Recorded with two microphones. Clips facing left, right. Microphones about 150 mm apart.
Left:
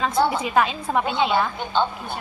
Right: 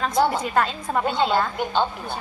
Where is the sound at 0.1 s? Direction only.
10° left (ahead or behind).